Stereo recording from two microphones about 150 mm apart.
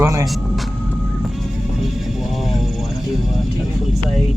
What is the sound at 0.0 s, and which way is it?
Music, 20° right (ahead or behind).